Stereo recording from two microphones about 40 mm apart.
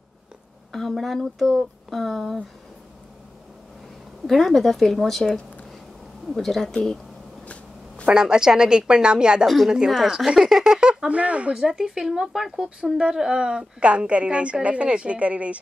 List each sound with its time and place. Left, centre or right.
0.7 s speech: centre
4.3 s speech: centre
6.3 s speech: centre
8.1 s a woman's voice: centre
11.5 s speech: centre
12.8 s a woman's voice: centre; by 15.6 s right